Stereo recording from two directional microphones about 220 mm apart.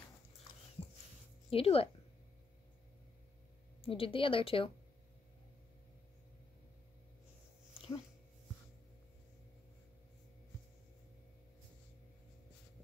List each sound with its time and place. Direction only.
1.5 s speech: 25° left (ahead or behind)
3.8 s speech: 25° left (ahead or behind)
7.7 s dog: 25° left (ahead or behind)